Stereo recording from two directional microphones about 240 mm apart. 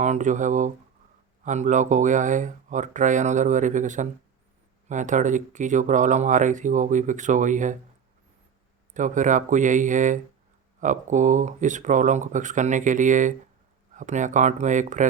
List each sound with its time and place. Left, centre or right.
0.0 s speech: right
8.9 s speech: right